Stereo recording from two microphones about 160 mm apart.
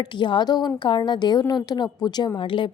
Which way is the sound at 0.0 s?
30° left (ahead or behind).